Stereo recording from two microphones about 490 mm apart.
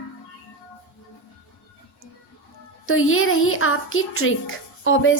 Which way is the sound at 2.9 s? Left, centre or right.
Left.